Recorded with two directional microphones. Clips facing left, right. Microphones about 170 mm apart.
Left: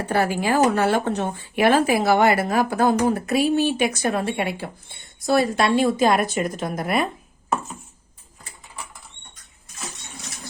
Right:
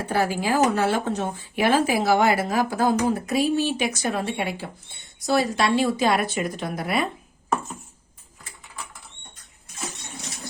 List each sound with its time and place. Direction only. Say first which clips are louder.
0.1 s speech: left 2 dB; 60° left (ahead or behind)